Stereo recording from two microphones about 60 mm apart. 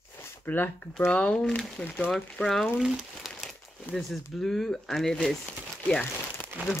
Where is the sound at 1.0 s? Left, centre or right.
Centre.